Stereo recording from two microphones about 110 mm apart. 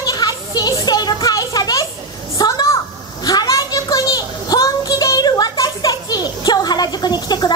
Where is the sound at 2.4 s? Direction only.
40° left (ahead or behind).